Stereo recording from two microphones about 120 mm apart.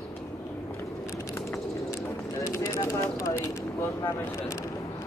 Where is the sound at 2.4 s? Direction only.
25° left (ahead or behind).